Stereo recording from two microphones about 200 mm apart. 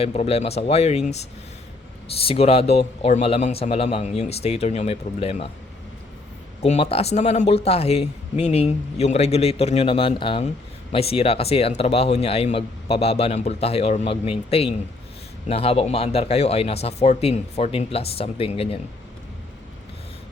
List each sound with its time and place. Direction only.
0.0 s a man's voice: 30° left (ahead or behind)
2.2 s a man's voice: 30° left (ahead or behind)
6.6 s a man's voice: 30° left (ahead or behind)